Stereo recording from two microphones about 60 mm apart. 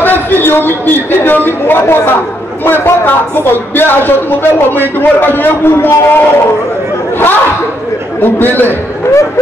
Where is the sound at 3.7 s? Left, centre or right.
Left.